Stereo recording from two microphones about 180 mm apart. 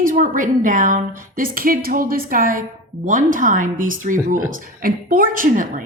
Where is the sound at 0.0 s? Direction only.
50° right (ahead or behind).